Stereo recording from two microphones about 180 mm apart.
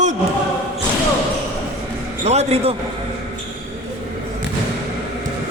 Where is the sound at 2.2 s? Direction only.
35° right (ahead or behind).